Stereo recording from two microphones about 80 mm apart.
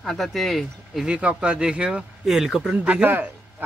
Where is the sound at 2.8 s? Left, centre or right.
Centre.